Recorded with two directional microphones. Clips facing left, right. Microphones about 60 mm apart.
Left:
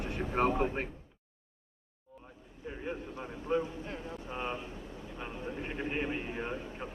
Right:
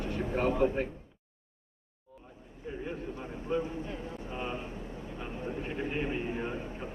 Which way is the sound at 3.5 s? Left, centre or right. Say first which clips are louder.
Left 1 dB; left.